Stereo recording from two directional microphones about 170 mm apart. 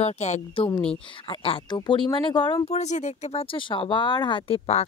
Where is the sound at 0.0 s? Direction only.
40° left (ahead or behind).